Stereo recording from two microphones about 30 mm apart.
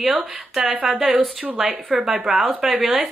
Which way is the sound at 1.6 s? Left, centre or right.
Right.